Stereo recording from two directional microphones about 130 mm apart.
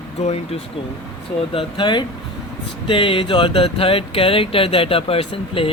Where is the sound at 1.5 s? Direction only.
35° left (ahead or behind).